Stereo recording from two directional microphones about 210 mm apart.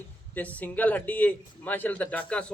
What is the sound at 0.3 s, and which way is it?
A man's voice, 5° left (ahead or behind).